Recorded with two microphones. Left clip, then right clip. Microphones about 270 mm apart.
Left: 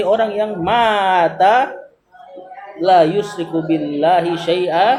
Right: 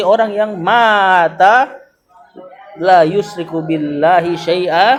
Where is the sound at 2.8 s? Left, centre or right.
Right.